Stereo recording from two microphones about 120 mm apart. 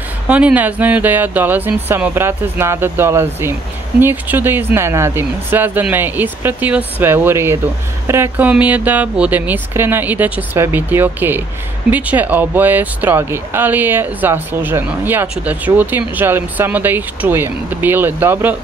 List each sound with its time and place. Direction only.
0.3 s speech: 10° right (ahead or behind)